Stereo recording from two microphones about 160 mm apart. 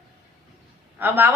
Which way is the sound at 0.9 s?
15° right (ahead or behind).